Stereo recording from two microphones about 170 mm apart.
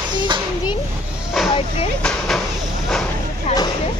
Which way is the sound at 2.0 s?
5° left (ahead or behind).